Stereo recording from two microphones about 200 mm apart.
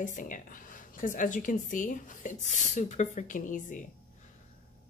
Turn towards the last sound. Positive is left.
turn(degrees=40)  # may be behind; listen again after turning